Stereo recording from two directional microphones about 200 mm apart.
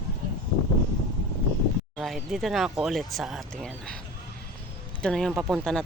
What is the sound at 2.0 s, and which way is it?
Speech, centre (ahead or behind).